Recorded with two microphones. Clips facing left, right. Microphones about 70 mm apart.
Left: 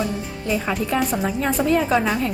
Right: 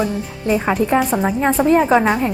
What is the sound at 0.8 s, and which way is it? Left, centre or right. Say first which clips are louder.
A woman's voice: right 5 dB; right.